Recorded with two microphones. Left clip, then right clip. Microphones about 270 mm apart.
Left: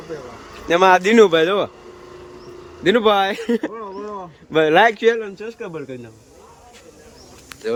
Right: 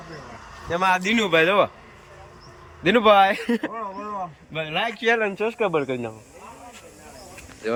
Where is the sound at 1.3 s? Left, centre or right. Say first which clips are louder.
Left 1 dB; centre.